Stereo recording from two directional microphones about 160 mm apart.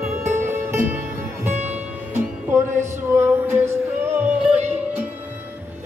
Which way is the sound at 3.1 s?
15° right (ahead or behind).